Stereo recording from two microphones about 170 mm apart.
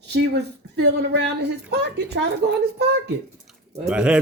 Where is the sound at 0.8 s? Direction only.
85° right.